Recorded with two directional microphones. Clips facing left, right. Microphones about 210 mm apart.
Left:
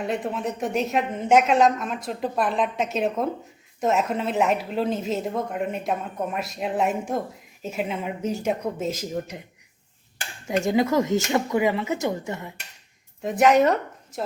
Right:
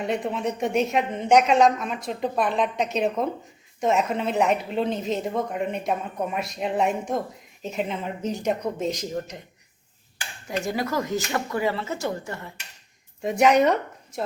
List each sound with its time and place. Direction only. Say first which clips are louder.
0.0 s speech: right 1 dB; centre (ahead or behind)
10.6 s speech: left 6 dB; 20° left (ahead or behind)
13.2 s speech: left 1 dB; centre (ahead or behind)